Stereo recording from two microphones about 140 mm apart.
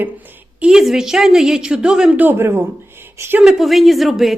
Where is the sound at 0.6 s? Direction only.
5° right (ahead or behind).